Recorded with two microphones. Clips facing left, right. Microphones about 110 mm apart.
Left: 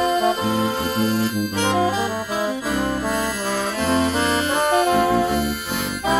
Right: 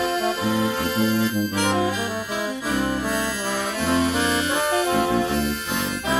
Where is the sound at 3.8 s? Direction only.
40° left (ahead or behind).